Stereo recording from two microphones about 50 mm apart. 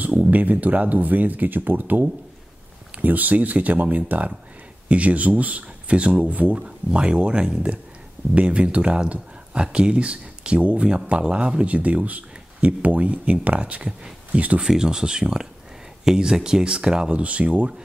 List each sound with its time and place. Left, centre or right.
0.0 s speech: right
14.6 s speech: centre